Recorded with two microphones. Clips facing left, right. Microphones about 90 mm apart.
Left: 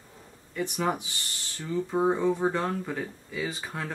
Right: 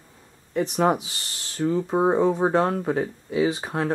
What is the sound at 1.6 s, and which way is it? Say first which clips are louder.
Speech: right 5 dB; 55° right (ahead or behind).